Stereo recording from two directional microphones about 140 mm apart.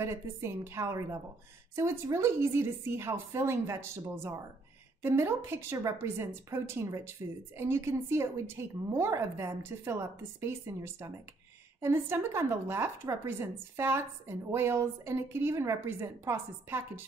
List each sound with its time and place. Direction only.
0.0 s a woman's voice: 20° right (ahead or behind)